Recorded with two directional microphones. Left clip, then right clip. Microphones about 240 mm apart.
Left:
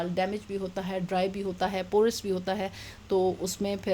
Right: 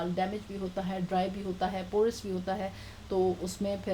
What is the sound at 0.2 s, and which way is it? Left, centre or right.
Speech, left.